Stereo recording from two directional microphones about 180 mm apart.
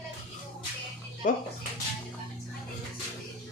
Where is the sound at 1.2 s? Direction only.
45° left (ahead or behind).